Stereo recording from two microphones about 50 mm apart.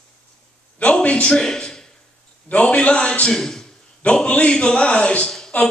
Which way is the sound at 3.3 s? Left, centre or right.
Centre.